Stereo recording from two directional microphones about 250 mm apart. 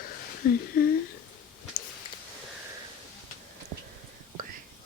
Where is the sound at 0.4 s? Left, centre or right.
Left.